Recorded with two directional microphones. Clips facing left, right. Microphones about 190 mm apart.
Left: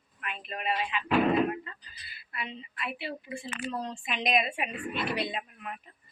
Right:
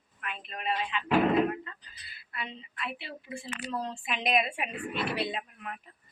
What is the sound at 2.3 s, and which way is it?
A woman's voice, 5° left (ahead or behind).